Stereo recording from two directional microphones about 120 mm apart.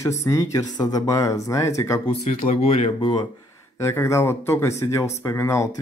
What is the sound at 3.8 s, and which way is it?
Speech, 25° left (ahead or behind).